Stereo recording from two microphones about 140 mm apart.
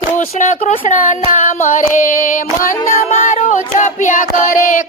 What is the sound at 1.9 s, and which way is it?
Child singing, 90° left.